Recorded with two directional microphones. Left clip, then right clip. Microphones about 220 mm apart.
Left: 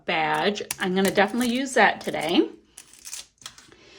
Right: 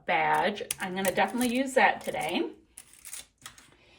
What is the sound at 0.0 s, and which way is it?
Speech, 10° left (ahead or behind).